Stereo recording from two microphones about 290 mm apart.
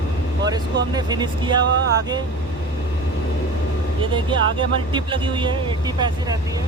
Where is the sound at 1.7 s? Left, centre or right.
Right.